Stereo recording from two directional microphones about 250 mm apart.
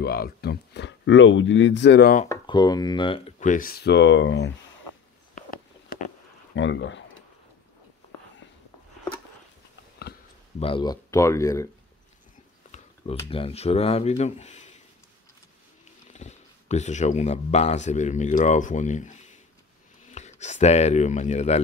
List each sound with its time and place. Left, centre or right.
0.0 s speech: left
2.2 s speech: centre; by 4.5 s left
6.5 s speech: left
10.6 s speech: centre
13.3 s speech: left
16.1 s speech: left